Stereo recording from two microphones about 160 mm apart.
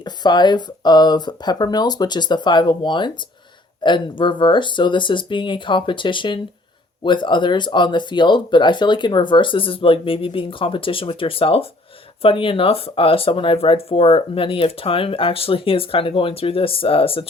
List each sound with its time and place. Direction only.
0.0 s speech: 25° left (ahead or behind)